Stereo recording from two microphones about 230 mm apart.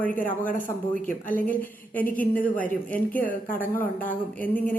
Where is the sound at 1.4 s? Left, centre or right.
Centre.